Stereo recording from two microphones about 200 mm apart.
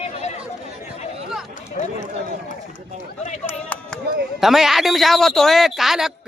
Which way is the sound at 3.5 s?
5° left (ahead or behind).